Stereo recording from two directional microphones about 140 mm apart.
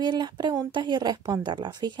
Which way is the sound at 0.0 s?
30° right (ahead or behind).